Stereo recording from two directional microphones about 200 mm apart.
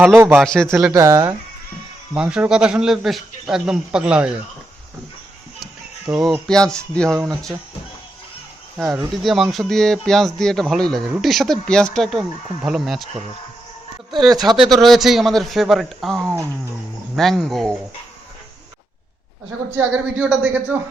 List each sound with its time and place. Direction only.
0.0 s speech: 10° right (ahead or behind)
0.3 s speech: 5° left (ahead or behind)
0.9 s speech: 15° right (ahead or behind)
2.1 s speech: 5° right (ahead or behind)
6.1 s speech: centre (ahead or behind)
9.2 s speech: centre (ahead or behind)
14.5 s speech: centre (ahead or behind)
19.7 s speech: 10° right (ahead or behind)